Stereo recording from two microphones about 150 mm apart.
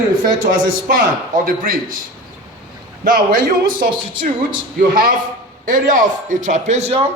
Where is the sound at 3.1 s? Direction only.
70° right (ahead or behind).